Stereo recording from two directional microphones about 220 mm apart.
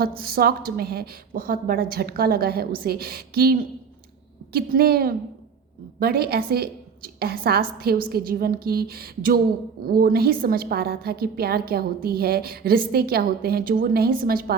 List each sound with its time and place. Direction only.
0.0 s a woman's voice: 45° right (ahead or behind)